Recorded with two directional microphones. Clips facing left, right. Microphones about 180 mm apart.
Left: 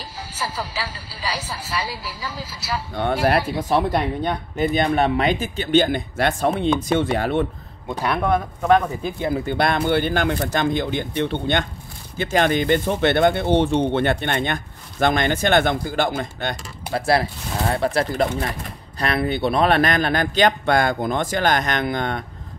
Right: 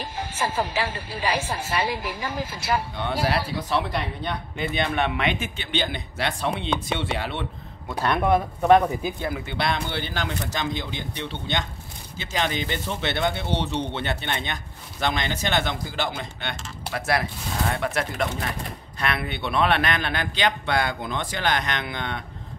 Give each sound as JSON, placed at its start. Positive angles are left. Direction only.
{"t": 0.4, "sound": "a woman's voice", "side_deg": -50}
{"t": 2.9, "sound": "speech", "side_deg": 50}
{"t": 9.5, "sound": "speech", "side_deg": 50}